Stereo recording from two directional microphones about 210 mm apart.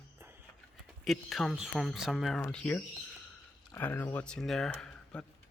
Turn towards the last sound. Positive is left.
turn(degrees=5)  # may be behind; listen again after turning